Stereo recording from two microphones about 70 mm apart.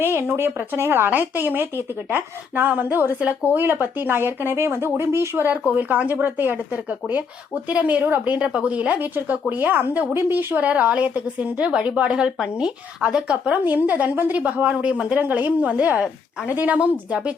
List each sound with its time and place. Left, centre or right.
0.0 s a woman's voice: right
5.7 s a woman's voice: right
7.7 s a woman's voice: centre